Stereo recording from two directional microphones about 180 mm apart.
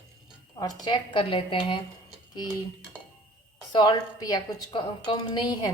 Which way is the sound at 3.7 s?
25° left (ahead or behind).